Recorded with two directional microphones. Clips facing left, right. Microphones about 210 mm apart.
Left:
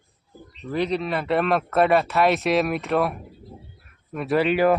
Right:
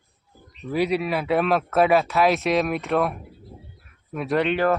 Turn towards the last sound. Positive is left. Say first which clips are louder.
# left 2 dB
turn(degrees=5)  # may be behind; listen again after turning